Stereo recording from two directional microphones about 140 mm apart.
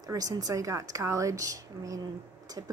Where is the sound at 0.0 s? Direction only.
25° right (ahead or behind).